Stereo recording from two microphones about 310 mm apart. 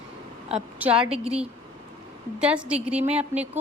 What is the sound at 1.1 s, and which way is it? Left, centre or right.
Speech, centre.